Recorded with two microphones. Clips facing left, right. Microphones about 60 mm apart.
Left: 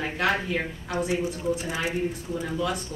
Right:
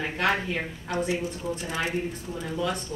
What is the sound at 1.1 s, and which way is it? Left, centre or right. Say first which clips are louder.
Speech: left 3 dB; centre.